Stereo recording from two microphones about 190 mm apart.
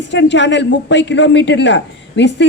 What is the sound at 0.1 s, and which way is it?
A woman's voice, 70° left (ahead or behind).